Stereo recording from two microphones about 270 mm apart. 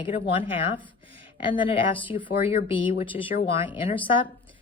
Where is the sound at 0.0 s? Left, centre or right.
Centre.